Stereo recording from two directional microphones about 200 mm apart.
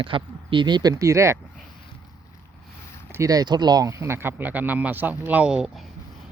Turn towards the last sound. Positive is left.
turn(degrees=-5)  # may be behind; listen again after turning